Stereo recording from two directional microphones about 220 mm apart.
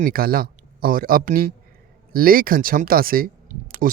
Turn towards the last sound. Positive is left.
turn(degrees=-40)  # may be behind; listen again after turning